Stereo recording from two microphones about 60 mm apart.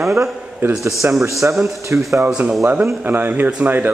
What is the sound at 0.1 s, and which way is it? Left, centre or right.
Speech, right.